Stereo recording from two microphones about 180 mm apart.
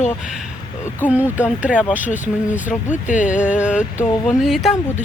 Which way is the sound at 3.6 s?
5° right (ahead or behind).